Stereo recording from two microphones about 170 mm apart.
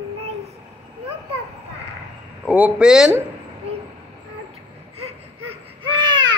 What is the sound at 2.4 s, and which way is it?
Speech, 10° right (ahead or behind).